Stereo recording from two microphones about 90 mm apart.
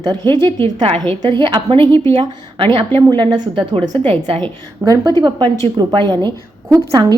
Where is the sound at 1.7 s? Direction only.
70° right (ahead or behind).